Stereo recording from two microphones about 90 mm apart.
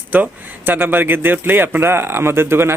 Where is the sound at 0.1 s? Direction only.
20° right (ahead or behind).